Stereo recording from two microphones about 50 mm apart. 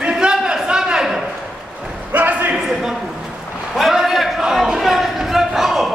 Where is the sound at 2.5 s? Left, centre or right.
Centre.